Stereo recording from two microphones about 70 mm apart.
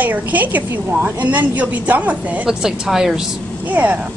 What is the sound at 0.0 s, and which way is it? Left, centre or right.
A woman's voice, right.